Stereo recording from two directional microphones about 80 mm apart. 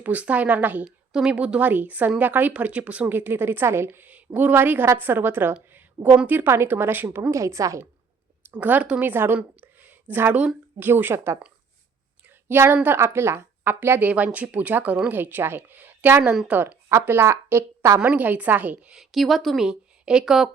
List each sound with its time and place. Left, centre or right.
0.0 s a woman's voice: centre
0.9 s a woman's voice: centre; by 5.5 s right
5.6 s a sound: right
6.2 s a woman's voice: right
8.4 s a woman's voice: right
12.2 s a sound: right
13.0 s a woman's voice: right
16.2 s speech: centre
16.5 s a woman's voice: right
16.9 s speech: right
18.0 s a woman's voice: centre
19.1 s speech: centre
19.6 s a woman's voice: centre